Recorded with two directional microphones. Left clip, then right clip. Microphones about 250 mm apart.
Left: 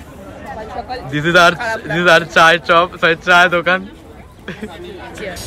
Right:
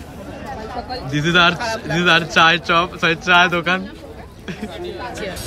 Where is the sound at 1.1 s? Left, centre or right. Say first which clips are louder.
Left 4 dB; centre.